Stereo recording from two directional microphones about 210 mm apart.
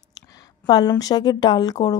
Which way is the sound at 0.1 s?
15° left (ahead or behind).